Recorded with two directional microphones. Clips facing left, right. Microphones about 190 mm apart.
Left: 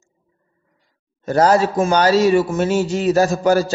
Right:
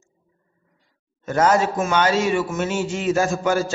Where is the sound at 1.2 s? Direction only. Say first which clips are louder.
Left 4 dB; 35° left (ahead or behind).